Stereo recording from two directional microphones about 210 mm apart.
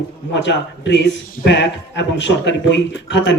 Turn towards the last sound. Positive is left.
turn(degrees=60)  # may be behind; listen again after turning